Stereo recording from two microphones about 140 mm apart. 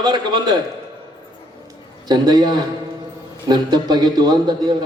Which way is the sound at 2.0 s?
30° right (ahead or behind).